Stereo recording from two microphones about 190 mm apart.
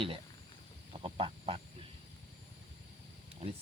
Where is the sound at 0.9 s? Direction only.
30° right (ahead or behind).